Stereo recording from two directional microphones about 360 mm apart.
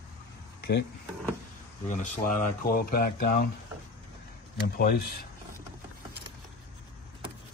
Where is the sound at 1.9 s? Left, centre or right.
Left.